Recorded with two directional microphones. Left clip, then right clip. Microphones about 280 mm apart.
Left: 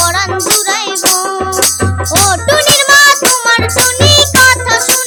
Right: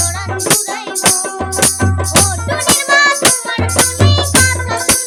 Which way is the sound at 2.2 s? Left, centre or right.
Left.